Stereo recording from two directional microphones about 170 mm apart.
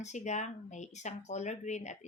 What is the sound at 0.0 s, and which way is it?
Speech, 45° left (ahead or behind).